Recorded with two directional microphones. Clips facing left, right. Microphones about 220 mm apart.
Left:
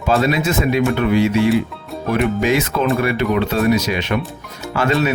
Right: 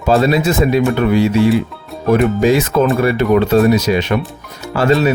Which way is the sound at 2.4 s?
35° right (ahead or behind).